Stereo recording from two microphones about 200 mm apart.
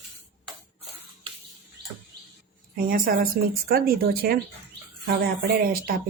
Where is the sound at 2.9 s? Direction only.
50° right (ahead or behind).